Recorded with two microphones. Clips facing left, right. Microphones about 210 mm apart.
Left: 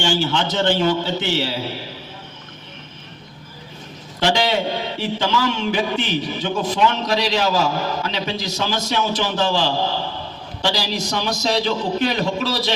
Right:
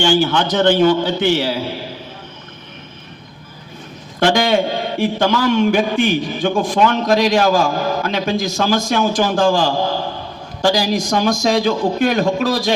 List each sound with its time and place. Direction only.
0.0 s a man's voice: 55° right (ahead or behind)
4.2 s a man's voice: 50° right (ahead or behind)